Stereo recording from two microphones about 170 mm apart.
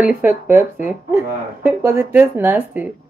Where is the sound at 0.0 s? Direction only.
10° right (ahead or behind).